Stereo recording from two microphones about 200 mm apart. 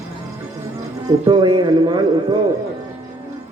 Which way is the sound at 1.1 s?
20° right (ahead or behind).